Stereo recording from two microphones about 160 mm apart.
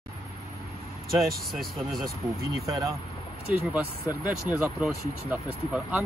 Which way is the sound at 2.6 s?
20° right (ahead or behind).